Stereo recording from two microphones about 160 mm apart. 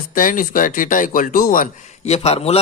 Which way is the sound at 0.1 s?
60° left (ahead or behind).